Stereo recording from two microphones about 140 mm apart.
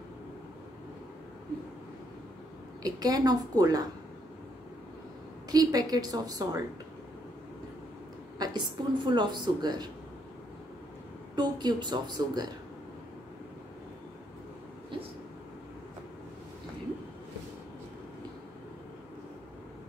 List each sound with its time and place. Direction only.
2.8 s a woman's voice: 25° right (ahead or behind)
5.5 s a woman's voice: 25° right (ahead or behind)
8.4 s a woman's voice: 30° right (ahead or behind)
11.3 s a woman's voice: 30° right (ahead or behind)